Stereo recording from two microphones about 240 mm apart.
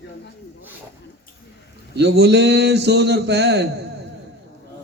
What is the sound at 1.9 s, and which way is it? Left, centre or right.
A man's voice, right.